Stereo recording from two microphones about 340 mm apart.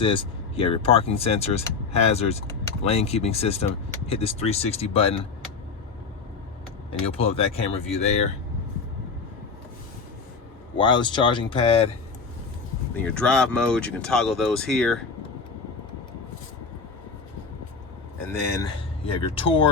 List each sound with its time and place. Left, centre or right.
0.0 s speech: centre
7.0 s speech: centre
10.8 s speech: centre
13.1 s speech: centre
18.3 s speech: centre